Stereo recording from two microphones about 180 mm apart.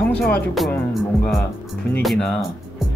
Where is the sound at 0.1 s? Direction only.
5° left (ahead or behind).